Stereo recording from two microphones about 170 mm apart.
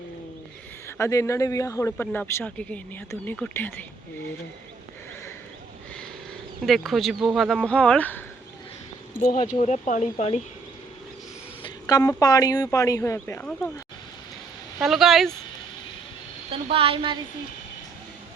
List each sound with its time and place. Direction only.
0.9 s a man's voice: 15° left (ahead or behind)
6.7 s speech: centre (ahead or behind)
9.2 s speech: 40° left (ahead or behind)
11.6 s speech: 20° left (ahead or behind)
14.8 s speech: centre (ahead or behind)
16.5 s speech: 35° right (ahead or behind)